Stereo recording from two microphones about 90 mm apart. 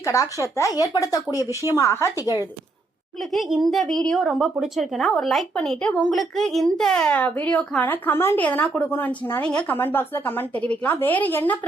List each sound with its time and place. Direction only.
0.0 s speech: 35° left (ahead or behind)
3.3 s a woman's voice: centre (ahead or behind)
5.5 s a woman's voice: 10° left (ahead or behind)
8.4 s a woman's voice: 15° left (ahead or behind)
9.4 s a woman's voice: 10° left (ahead or behind)
9.7 s a woman's voice: 25° left (ahead or behind)